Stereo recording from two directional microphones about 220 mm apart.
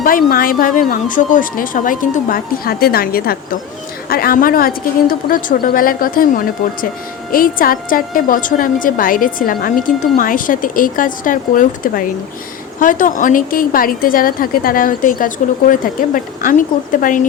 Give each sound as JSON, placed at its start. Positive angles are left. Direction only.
{"t": 0.0, "sound": "a woman's voice", "side_deg": 40}